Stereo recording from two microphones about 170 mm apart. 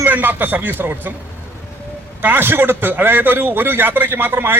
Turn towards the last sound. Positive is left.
turn(degrees=-10)  # may be behind; listen again after turning